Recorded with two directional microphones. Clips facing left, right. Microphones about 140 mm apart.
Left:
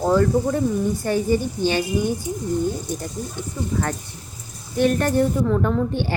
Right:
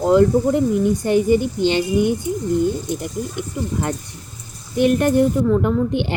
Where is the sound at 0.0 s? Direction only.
20° right (ahead or behind).